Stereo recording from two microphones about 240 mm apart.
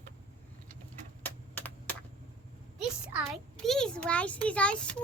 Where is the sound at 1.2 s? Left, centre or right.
Centre.